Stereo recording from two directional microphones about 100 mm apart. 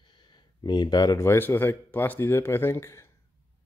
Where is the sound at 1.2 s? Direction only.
25° left (ahead or behind).